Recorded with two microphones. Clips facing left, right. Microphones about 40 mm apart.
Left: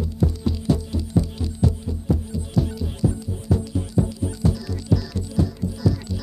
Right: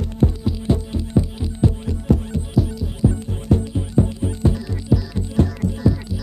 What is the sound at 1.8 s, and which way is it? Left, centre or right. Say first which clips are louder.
Music: right 5 dB; right.